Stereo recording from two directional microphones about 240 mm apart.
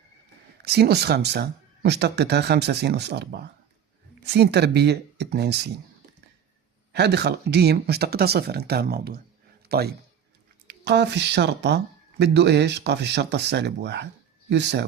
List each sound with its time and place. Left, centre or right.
0.6 s speech: right
6.9 s speech: right